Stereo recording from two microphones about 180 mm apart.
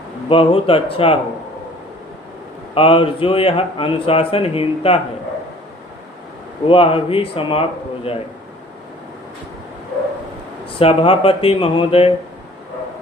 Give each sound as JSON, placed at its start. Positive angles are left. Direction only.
{"t": 0.3, "sound": "a man's voice", "side_deg": 30}
{"t": 2.7, "sound": "a man's voice", "side_deg": 30}
{"t": 6.7, "sound": "a man's voice", "side_deg": 30}
{"t": 10.8, "sound": "a man's voice", "side_deg": 30}